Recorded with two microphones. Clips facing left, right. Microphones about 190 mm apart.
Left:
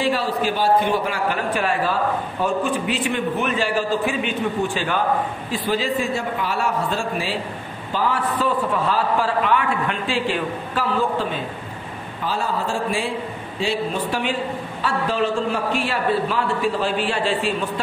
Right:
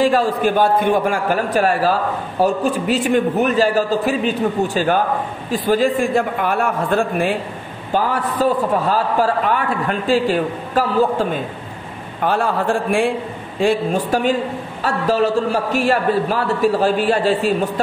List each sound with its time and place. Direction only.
0.0 s a man's voice: 45° right (ahead or behind)
7.9 s a man's voice: 40° right (ahead or behind)
12.2 s a man's voice: 60° right (ahead or behind); by 17.6 s 40° right (ahead or behind)